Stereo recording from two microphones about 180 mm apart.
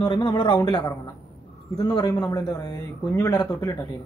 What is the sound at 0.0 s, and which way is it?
Speech, 25° left (ahead or behind).